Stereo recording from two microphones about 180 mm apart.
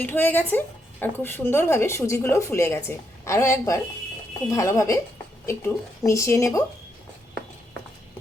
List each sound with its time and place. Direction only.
0.0 s speech: 10° left (ahead or behind)